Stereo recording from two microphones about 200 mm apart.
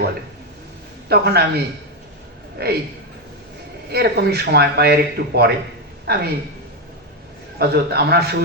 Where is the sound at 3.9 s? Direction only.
55° right (ahead or behind).